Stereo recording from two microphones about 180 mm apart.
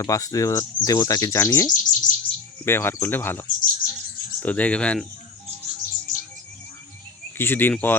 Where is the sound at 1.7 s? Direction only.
45° left (ahead or behind).